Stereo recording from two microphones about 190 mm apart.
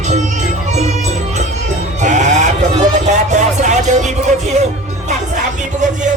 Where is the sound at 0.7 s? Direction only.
35° right (ahead or behind).